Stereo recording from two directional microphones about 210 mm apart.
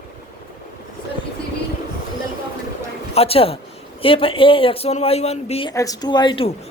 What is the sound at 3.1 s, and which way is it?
A man's voice, 30° left (ahead or behind).